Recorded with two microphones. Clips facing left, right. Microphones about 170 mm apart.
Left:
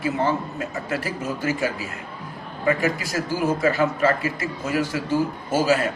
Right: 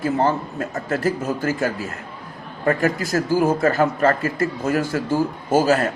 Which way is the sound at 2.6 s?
50° right (ahead or behind).